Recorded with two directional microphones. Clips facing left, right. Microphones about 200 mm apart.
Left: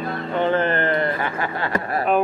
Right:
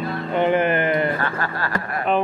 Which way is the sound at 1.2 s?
20° left (ahead or behind).